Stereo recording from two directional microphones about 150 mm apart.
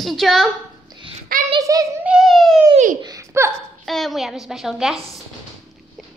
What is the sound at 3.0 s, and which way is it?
Laughter, 20° right (ahead or behind).